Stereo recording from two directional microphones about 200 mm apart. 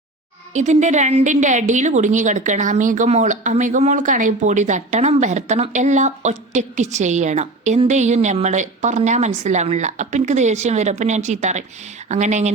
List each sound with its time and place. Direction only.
0.5 s a woman's voice: 35° right (ahead or behind)